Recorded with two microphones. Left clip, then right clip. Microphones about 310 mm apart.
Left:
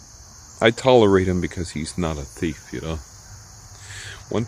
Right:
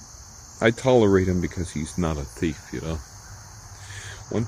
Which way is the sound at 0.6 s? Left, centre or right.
Centre.